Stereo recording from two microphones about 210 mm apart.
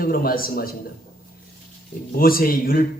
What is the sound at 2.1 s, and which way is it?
Speech, 45° left (ahead or behind).